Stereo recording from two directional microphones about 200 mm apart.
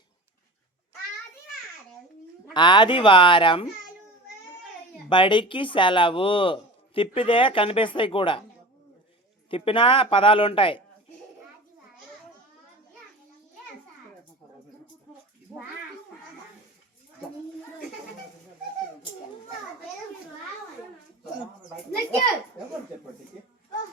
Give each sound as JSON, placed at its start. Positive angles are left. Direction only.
{"t": 2.5, "sound": "speech", "side_deg": 20}
{"t": 5.0, "sound": "speech", "side_deg": 25}
{"t": 9.5, "sound": "speech", "side_deg": 25}